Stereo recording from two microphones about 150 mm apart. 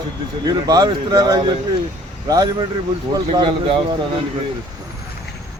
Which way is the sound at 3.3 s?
35° right (ahead or behind).